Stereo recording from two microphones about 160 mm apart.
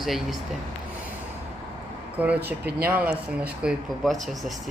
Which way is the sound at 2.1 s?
10° right (ahead or behind).